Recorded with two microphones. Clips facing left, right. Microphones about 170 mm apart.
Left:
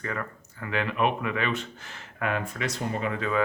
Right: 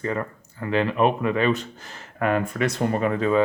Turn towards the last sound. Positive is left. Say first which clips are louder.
# right 7 dB
turn(degrees=-40)  # may be behind; listen again after turning